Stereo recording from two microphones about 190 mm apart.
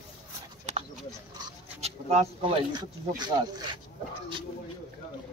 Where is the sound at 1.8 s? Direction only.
35° right (ahead or behind).